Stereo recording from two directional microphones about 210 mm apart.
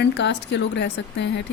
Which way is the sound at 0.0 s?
55° left (ahead or behind).